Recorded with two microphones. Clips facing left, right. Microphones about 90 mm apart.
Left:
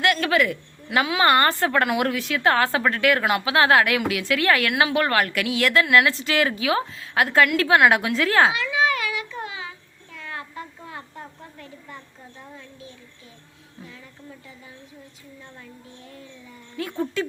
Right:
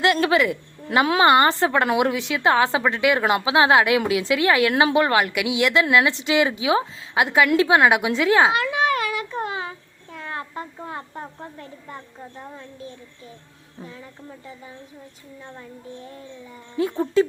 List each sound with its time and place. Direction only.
0.0 s a woman's voice: 25° right (ahead or behind)
4.7 s a woman's voice: 35° right (ahead or behind)
4.9 s a woman's voice: 20° right (ahead or behind)
8.5 s child singing: 50° right (ahead or behind)
13.8 s speech: 35° right (ahead or behind)
16.7 s a woman's voice: 25° right (ahead or behind)